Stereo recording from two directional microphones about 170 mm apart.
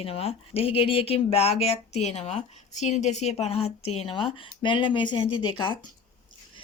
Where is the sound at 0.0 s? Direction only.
35° left (ahead or behind).